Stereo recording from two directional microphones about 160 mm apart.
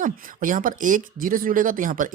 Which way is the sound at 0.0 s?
55° right (ahead or behind).